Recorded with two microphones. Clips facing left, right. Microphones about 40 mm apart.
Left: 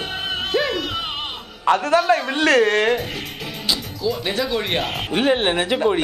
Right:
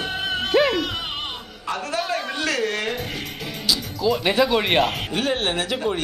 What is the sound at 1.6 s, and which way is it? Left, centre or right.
Speech, left.